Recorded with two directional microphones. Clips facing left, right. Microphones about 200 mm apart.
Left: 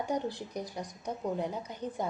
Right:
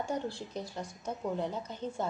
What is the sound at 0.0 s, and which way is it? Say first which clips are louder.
A woman's voice: left 2 dB; 15° left (ahead or behind).